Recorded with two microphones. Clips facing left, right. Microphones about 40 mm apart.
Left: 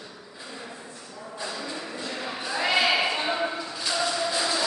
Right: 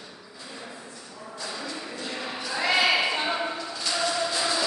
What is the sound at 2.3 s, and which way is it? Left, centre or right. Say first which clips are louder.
Basketball bounce: even; centre.